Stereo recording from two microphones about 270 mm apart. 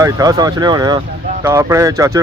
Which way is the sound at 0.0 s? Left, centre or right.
Centre.